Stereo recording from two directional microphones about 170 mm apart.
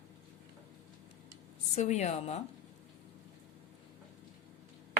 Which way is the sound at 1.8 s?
40° left (ahead or behind).